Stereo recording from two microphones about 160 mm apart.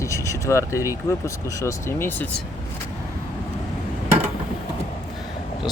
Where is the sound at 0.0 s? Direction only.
20° left (ahead or behind).